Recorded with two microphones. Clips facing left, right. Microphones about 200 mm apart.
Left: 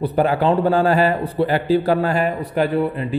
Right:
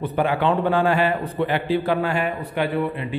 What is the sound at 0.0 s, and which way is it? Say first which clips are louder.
A man's voice: left 4 dB; 40° left (ahead or behind).